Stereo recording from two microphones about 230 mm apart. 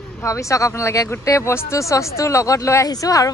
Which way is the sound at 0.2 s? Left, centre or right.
Centre.